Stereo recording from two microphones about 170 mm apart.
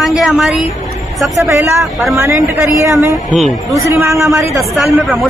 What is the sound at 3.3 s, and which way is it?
Speech, centre (ahead or behind).